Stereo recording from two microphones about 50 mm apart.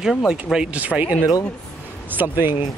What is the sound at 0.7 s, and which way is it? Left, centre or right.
Speech, right.